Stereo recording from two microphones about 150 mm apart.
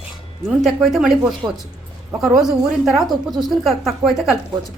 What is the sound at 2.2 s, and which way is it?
Speech, centre (ahead or behind).